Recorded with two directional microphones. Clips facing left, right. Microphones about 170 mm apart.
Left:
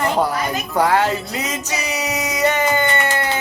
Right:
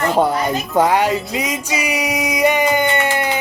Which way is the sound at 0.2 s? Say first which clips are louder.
Right 3 dB; 25° right (ahead or behind).